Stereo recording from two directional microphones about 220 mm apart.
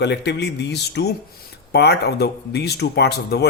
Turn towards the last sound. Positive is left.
turn(degrees=50)  # may be behind; listen again after turning